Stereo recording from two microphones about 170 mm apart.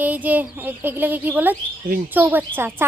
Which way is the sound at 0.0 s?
10° right (ahead or behind).